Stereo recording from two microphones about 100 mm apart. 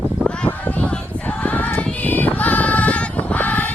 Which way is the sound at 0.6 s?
15° left (ahead or behind).